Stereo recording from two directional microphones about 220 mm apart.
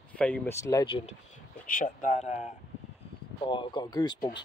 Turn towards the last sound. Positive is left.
turn(degrees=20)  # may be behind; listen again after turning